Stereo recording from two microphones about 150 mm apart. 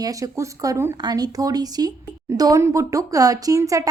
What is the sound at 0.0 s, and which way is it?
Speech, 20° right (ahead or behind).